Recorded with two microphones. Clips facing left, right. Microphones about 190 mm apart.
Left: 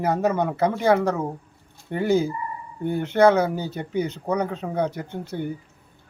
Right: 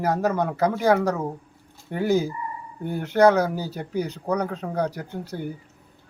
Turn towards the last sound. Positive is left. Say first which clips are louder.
# left 2 dB
turn(degrees=0)  # may be behind; listen again after turning